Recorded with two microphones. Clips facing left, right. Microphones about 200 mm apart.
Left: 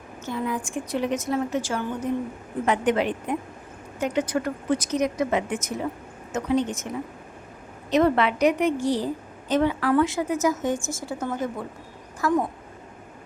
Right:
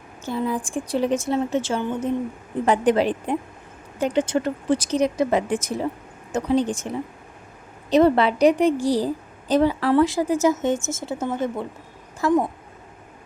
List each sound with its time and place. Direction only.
0.3 s speech: 30° right (ahead or behind)
2.6 s speech: 35° right (ahead or behind)